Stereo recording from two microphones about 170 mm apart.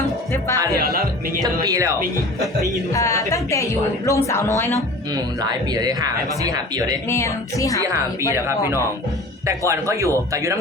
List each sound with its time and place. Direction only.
0.8 s music: 60° right (ahead or behind)
1.6 s speech: 20° right (ahead or behind)
2.9 s a woman's voice: 20° left (ahead or behind)
5.1 s speech: 20° right (ahead or behind)
7.1 s a woman's voice: 15° left (ahead or behind)
8.4 s speech: 15° right (ahead or behind)